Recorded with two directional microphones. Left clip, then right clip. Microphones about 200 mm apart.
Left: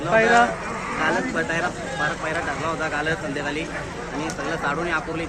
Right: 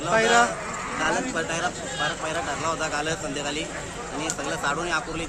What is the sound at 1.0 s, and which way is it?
Speech, 15° right (ahead or behind).